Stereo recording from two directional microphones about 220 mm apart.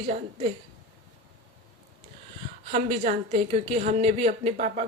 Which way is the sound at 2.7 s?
35° right (ahead or behind).